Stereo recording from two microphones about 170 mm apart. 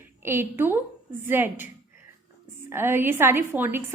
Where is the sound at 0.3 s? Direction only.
15° right (ahead or behind).